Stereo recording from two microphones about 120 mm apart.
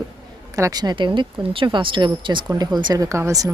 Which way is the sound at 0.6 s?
30° right (ahead or behind).